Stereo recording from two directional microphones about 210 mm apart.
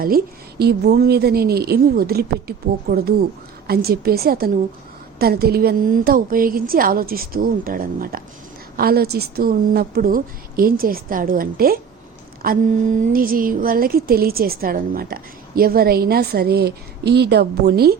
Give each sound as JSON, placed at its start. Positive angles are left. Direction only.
{"t": 0.0, "sound": "a woman's voice", "side_deg": -45}